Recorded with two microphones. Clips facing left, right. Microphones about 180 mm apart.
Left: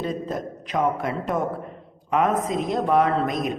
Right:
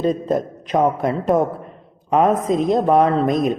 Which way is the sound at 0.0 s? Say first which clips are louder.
Right 8 dB; 40° right (ahead or behind).